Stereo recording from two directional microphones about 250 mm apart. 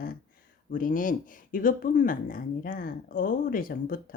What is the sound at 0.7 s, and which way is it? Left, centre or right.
Speech, left.